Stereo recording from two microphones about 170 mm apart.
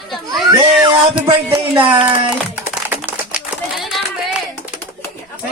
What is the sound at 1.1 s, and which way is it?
Music, 10° right (ahead or behind).